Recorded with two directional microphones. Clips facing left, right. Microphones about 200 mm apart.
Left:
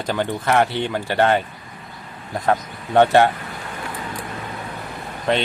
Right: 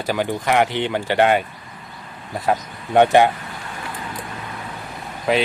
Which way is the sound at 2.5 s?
15° right (ahead or behind).